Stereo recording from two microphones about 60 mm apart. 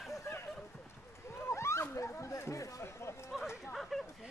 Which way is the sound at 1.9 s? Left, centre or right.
Left.